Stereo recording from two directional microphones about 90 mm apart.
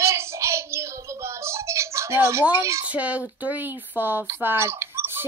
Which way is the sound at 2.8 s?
15° right (ahead or behind).